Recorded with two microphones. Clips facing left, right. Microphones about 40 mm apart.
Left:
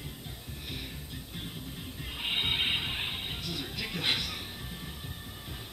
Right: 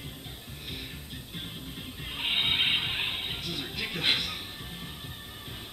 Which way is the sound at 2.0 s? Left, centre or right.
Right.